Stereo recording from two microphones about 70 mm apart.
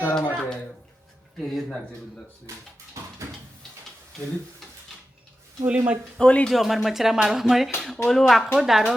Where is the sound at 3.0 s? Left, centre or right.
Right.